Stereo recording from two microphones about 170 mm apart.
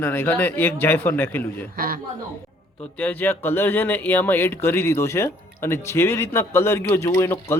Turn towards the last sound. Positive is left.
turn(degrees=15)  # may be behind; listen again after turning